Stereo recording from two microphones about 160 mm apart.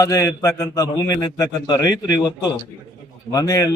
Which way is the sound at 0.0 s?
20° left (ahead or behind).